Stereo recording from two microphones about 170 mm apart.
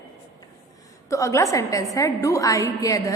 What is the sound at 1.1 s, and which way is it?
A woman's voice, 15° left (ahead or behind).